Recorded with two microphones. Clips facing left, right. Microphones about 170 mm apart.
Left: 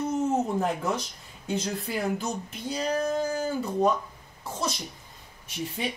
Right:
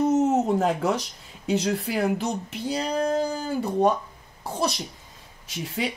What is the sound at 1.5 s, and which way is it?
Speech, 85° right.